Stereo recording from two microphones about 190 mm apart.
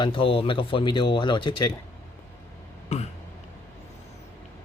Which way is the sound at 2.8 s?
35° left (ahead or behind).